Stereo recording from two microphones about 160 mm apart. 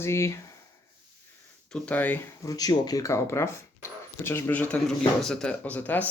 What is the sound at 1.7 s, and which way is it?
Speech, 10° left (ahead or behind).